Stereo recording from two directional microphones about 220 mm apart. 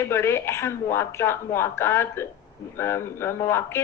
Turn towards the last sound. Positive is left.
turn(degrees=10)  # may be behind; listen again after turning